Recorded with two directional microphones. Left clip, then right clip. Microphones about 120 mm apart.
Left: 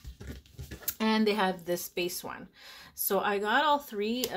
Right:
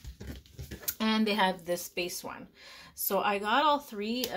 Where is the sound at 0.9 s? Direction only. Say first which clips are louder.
Left 2 dB; 25° left (ahead or behind).